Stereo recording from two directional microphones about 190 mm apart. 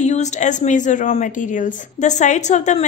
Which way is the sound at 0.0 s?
40° left (ahead or behind).